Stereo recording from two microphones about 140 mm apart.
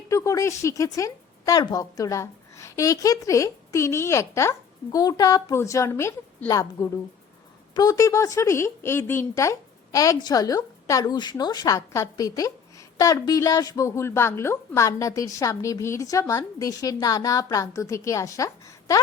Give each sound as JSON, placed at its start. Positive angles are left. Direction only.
{"t": 0.1, "sound": "speech", "side_deg": 20}